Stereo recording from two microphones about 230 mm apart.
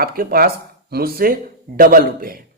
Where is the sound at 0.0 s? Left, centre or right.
Right.